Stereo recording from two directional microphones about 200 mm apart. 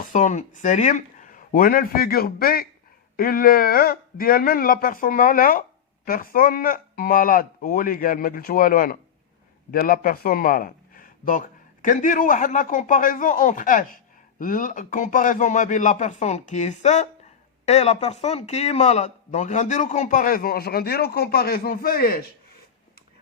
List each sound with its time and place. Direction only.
0.0 s a man's voice: 40° left (ahead or behind)